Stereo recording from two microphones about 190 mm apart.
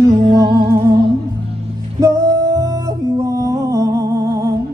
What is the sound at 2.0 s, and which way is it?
Music, 20° right (ahead or behind).